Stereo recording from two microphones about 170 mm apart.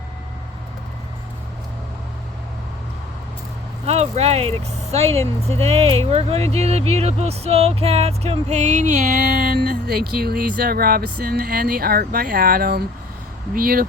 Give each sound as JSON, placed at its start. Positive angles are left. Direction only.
{"t": 3.8, "sound": "speech", "side_deg": -40}
{"t": 5.6, "sound": "speech", "side_deg": -40}